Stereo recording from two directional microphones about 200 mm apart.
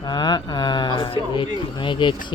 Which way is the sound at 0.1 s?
20° left (ahead or behind).